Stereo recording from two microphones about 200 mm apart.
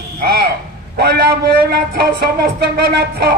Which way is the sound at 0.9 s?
50° right (ahead or behind).